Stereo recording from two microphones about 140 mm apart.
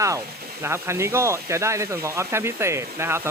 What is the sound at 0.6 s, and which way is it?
Speech, 20° right (ahead or behind).